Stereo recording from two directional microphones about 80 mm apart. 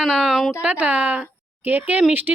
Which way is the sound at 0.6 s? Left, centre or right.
Centre.